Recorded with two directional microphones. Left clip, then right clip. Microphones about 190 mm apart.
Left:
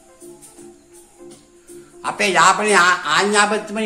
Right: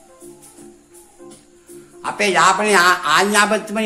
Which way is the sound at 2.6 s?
15° right (ahead or behind).